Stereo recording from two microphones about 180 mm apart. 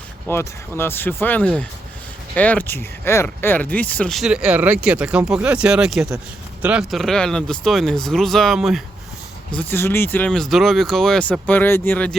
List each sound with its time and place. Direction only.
0.3 s speech: 10° left (ahead or behind)
9.6 s speech: 10° left (ahead or behind)